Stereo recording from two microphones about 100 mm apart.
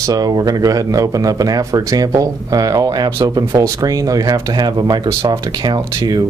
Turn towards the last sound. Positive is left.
turn(degrees=-45)  # may be behind; listen again after turning